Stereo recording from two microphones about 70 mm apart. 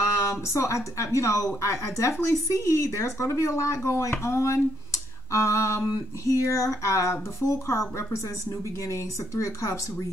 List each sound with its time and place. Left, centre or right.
0.2 s speech: left
9.3 s speech: left